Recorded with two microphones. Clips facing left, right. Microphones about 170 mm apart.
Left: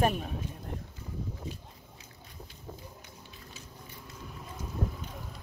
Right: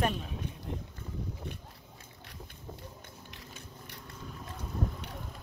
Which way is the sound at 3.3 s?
75° right (ahead or behind).